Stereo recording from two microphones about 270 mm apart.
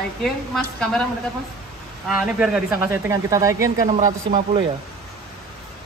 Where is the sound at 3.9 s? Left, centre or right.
Right.